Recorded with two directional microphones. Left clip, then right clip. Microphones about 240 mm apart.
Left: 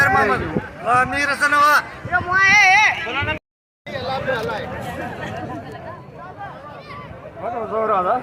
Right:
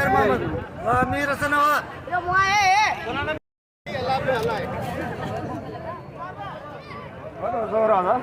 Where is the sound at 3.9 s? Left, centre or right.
Right.